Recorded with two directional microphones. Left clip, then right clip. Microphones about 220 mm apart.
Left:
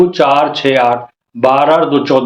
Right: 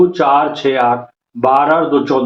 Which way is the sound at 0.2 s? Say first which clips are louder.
Left 2 dB; 40° left (ahead or behind).